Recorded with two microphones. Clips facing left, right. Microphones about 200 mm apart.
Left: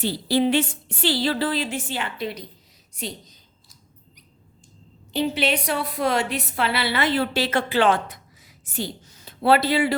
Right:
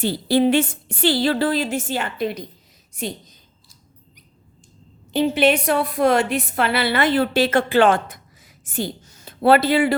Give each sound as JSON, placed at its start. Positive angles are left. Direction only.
{"t": 0.0, "sound": "a woman's voice", "side_deg": -50}
{"t": 5.1, "sound": "a woman's voice", "side_deg": -50}